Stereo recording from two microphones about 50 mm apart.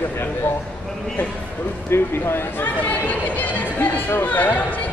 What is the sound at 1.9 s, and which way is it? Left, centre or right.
Speech, left.